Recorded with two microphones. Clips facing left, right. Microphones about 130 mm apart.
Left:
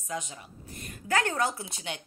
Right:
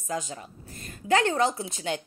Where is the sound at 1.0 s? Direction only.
25° right (ahead or behind).